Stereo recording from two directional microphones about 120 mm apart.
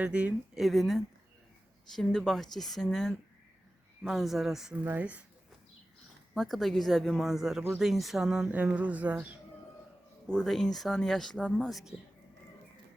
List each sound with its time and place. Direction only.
0.0 s speech: 10° right (ahead or behind)
6.3 s speech: centre (ahead or behind)
10.2 s speech: 5° left (ahead or behind)